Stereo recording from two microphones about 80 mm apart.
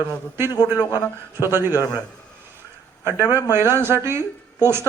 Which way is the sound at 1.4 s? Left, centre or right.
Right.